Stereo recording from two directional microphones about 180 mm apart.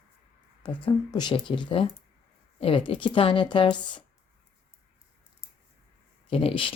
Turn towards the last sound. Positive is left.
turn(degrees=30)  # may be behind; listen again after turning